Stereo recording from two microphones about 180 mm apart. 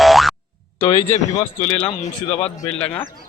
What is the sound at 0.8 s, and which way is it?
Speech, 20° left (ahead or behind).